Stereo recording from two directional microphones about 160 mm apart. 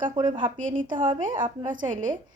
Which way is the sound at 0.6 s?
55° right (ahead or behind).